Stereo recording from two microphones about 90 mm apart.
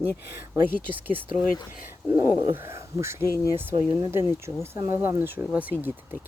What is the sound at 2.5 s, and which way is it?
Speech, 30° right (ahead or behind).